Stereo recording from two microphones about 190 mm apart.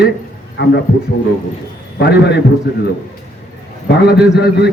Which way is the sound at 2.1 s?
60° left (ahead or behind).